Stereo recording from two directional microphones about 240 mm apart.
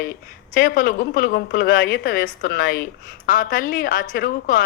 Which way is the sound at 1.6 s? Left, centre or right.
Left.